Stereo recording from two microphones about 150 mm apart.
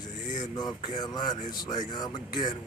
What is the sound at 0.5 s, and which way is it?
Speech, 30° left (ahead or behind).